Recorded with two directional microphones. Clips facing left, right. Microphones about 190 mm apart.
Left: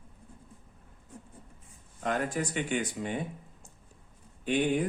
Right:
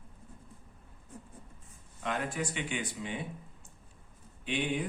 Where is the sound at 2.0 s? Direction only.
45° left (ahead or behind).